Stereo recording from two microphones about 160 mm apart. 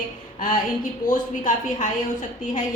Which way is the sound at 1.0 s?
55° left (ahead or behind).